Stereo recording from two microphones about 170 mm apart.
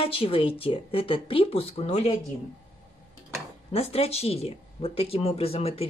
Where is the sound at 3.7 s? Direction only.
35° left (ahead or behind).